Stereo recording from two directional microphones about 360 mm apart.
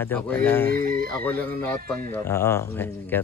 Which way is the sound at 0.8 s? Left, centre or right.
Right.